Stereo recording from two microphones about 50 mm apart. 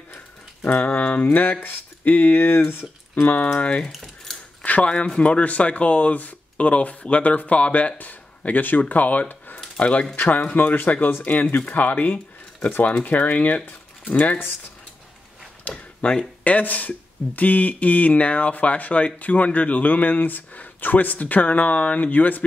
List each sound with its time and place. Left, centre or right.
0.7 s speech: left
1.2 s speech: left
3.5 s speech: left
3.9 s a sound: centre
4.6 s speech: left
15.6 s a sound: left
16.4 s speech: left